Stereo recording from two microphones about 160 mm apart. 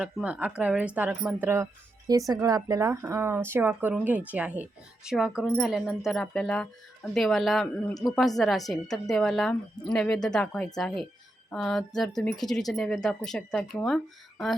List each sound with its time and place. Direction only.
0.0 s speech: 5° right (ahead or behind)